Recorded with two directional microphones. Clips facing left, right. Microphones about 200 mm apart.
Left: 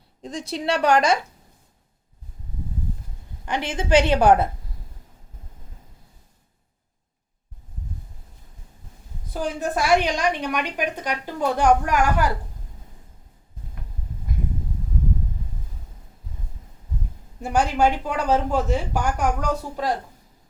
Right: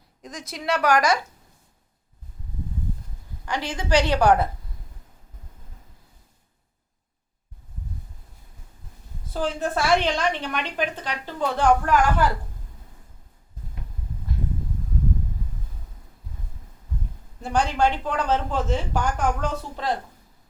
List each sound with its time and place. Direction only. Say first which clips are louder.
0.2 s a woman's voice: left 7 dB; 30° left (ahead or behind)
3.4 s a woman's voice: left 2 dB; 20° left (ahead or behind)
9.3 s a woman's voice: even; 15° left (ahead or behind)
17.4 s a woman's voice: left 2 dB; 10° left (ahead or behind)